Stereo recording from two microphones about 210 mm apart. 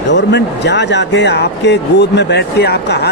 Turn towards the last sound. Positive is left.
turn(degrees=50)  # may be behind; listen again after turning